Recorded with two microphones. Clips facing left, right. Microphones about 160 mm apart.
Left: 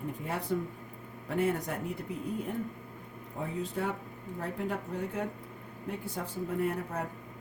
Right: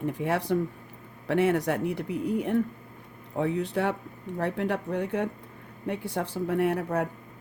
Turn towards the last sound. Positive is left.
turn(degrees=-70)  # may be behind; listen again after turning